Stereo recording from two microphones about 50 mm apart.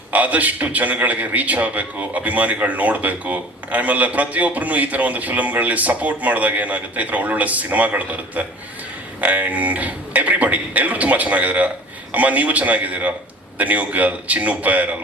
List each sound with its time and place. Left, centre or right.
0.1 s a man's voice: right